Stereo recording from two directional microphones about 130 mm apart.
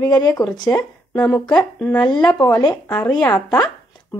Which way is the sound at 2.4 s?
35° left (ahead or behind).